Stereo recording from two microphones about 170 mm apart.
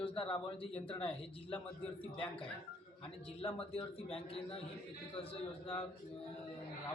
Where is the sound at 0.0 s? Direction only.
30° left (ahead or behind).